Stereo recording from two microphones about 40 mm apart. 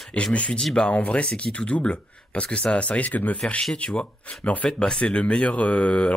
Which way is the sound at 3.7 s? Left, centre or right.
Left.